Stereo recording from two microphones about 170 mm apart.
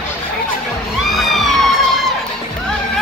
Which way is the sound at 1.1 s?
Centre (ahead or behind).